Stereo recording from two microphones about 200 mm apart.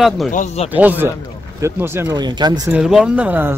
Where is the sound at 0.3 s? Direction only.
35° left (ahead or behind).